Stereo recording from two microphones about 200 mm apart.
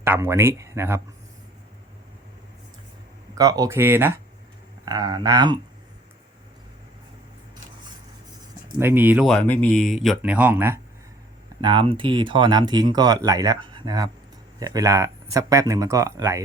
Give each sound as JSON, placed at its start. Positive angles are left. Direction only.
{"t": 0.0, "sound": "speech", "side_deg": -10}
{"t": 3.3, "sound": "speech", "side_deg": -20}
{"t": 8.8, "sound": "speech", "side_deg": -10}
{"t": 9.3, "sound": "speech", "side_deg": 5}
{"t": 11.6, "sound": "speech", "side_deg": -25}